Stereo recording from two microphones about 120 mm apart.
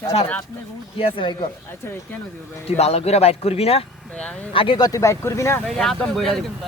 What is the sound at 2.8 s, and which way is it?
Speech, 60° left (ahead or behind).